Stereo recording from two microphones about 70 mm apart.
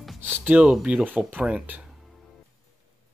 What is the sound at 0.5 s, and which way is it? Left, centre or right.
Speech, centre.